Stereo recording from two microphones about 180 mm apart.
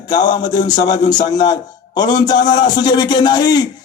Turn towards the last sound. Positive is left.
turn(degrees=20)  # may be behind; listen again after turning